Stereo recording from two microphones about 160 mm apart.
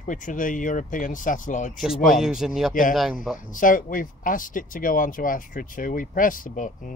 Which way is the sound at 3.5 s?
55° left (ahead or behind).